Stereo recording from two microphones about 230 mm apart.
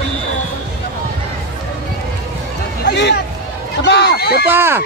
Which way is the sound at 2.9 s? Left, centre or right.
Left.